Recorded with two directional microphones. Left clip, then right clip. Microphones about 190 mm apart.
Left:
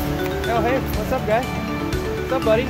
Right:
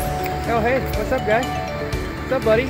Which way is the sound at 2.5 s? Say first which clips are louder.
Right 1 dB; 35° right (ahead or behind).